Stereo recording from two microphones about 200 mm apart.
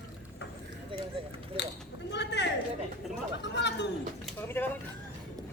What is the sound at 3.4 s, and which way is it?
Speech, 60° left (ahead or behind).